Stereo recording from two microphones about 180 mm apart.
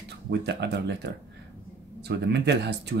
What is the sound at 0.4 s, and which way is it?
Speech, 65° right (ahead or behind).